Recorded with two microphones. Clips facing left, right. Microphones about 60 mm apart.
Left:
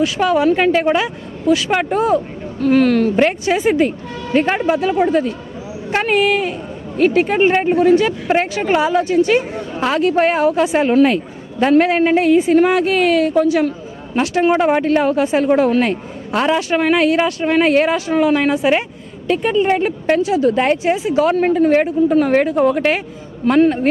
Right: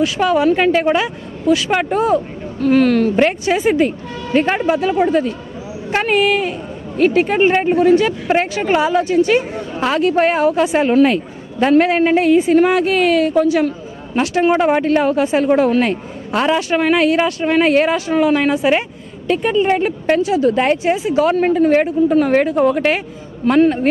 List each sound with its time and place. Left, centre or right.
0.0 s speech: centre